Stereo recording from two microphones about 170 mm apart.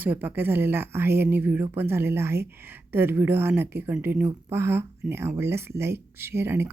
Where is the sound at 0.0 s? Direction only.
10° right (ahead or behind).